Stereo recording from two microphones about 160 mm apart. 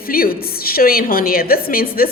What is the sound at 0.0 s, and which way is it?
A woman's voice, 65° left (ahead or behind).